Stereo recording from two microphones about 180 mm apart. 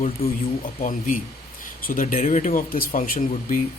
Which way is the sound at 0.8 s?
45° left (ahead or behind).